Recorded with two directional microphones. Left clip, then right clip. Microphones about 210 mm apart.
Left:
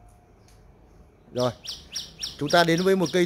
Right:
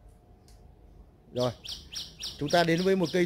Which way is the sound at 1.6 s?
50° left (ahead or behind).